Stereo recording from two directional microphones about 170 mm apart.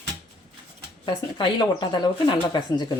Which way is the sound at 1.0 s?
25° left (ahead or behind).